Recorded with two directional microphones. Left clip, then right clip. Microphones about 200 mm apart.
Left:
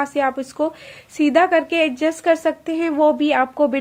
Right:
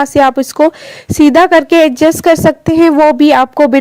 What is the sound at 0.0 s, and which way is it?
A woman's voice, 40° right (ahead or behind).